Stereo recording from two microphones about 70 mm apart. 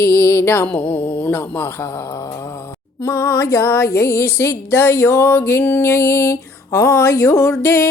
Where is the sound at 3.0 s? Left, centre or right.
Left.